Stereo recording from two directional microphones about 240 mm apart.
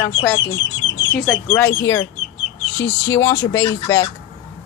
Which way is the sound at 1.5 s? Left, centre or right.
Centre.